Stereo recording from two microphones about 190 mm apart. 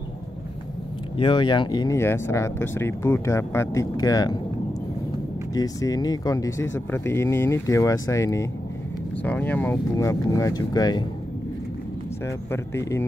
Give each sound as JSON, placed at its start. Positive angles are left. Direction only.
{"t": 1.1, "sound": "speech", "side_deg": 25}
{"t": 5.5, "sound": "speech", "side_deg": 20}
{"t": 12.3, "sound": "speech", "side_deg": 15}